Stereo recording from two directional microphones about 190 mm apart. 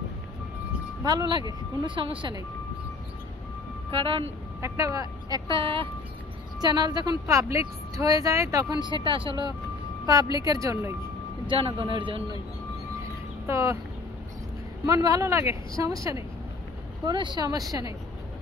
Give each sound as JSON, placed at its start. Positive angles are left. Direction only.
{"t": 1.0, "sound": "speech", "side_deg": -20}
{"t": 3.9, "sound": "speech", "side_deg": -30}
{"t": 4.6, "sound": "speech", "side_deg": -15}
{"t": 11.4, "sound": "speech", "side_deg": -25}
{"t": 13.5, "sound": "speech", "side_deg": -15}
{"t": 14.9, "sound": "speech", "side_deg": -20}